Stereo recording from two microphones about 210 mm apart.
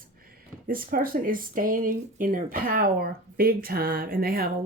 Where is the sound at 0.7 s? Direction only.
40° right (ahead or behind).